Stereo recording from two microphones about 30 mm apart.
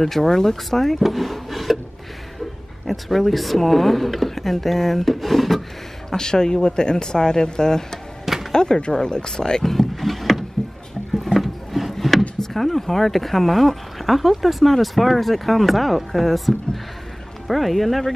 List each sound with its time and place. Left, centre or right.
0.0 s speech: centre
1.0 s wood: centre
2.9 s speech: centre
6.0 s speech: left
9.7 s rowboat: centre
11.2 s speech: centre